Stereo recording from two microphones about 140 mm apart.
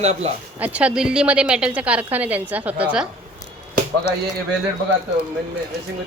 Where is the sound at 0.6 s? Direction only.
10° right (ahead or behind).